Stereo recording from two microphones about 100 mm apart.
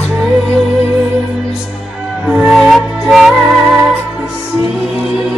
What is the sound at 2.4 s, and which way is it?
Music, centre (ahead or behind).